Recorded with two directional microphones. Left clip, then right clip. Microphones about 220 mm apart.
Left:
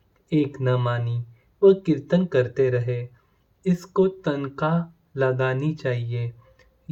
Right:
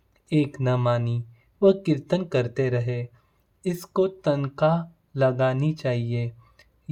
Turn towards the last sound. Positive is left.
turn(degrees=-45)  # may be behind; listen again after turning